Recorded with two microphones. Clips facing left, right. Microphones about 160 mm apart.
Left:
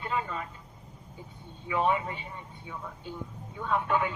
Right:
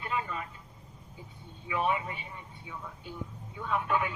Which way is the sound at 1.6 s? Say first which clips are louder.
Left 3 dB; 35° left (ahead or behind).